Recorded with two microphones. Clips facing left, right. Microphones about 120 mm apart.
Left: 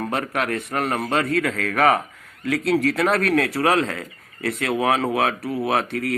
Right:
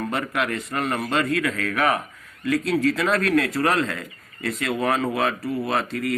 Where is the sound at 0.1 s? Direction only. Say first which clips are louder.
Left 1 dB; 80° left.